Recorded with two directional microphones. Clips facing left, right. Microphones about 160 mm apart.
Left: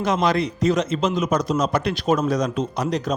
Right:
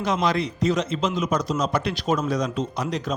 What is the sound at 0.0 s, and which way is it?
Speech, 50° left (ahead or behind).